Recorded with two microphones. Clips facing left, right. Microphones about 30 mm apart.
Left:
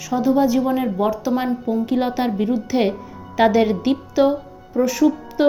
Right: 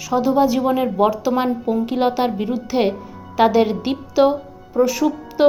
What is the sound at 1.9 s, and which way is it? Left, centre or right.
Speech, right.